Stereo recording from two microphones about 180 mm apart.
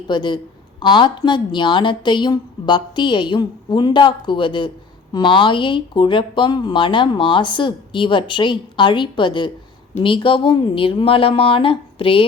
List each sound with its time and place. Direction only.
0.1 s speech: 25° left (ahead or behind)